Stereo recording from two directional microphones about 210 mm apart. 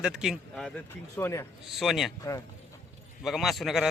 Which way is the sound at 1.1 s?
15° left (ahead or behind).